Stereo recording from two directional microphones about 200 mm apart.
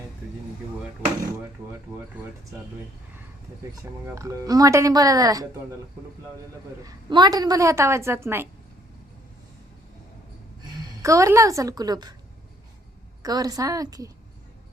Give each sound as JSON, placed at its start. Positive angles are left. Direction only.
{"t": 1.9, "sound": "a woman's voice", "side_deg": -15}
{"t": 4.0, "sound": "a woman's voice", "side_deg": -15}
{"t": 6.8, "sound": "a woman's voice", "side_deg": -20}
{"t": 11.0, "sound": "a woman's voice", "side_deg": -15}
{"t": 13.2, "sound": "a woman's voice", "side_deg": -20}